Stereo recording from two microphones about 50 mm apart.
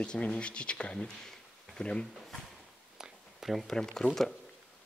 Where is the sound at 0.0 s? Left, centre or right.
Centre.